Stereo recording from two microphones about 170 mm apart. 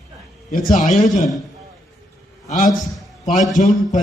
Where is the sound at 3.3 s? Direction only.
Centre (ahead or behind).